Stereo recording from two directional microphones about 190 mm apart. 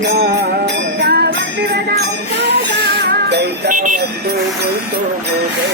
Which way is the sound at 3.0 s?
55° right (ahead or behind).